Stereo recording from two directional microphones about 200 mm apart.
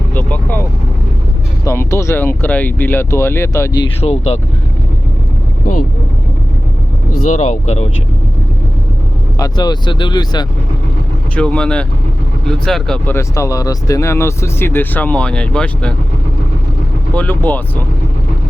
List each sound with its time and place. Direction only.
0.2 s speech: 10° left (ahead or behind)
1.6 s speech: 15° left (ahead or behind)
4.0 s speech: 35° left (ahead or behind)
7.3 s speech: 35° left (ahead or behind)
9.4 s speech: 20° left (ahead or behind)
11.3 s speech: 5° left (ahead or behind)
13.1 s speech: 15° left (ahead or behind)
17.2 s speech: 10° left (ahead or behind)